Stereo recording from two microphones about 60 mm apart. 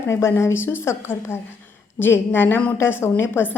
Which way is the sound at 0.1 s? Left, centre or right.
Left.